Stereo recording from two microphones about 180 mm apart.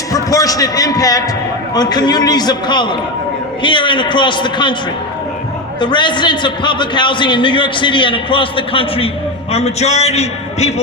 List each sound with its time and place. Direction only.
0.1 s a man's voice: 20° left (ahead or behind)
5.8 s a man's voice: 25° left (ahead or behind)